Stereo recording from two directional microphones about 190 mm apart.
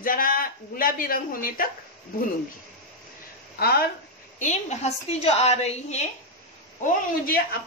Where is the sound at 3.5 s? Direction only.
55° left (ahead or behind).